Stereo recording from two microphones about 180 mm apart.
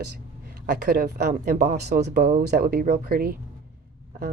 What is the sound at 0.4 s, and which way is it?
Speech, 55° right (ahead or behind).